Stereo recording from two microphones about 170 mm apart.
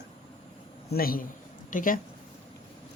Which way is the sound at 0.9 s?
60° left (ahead or behind).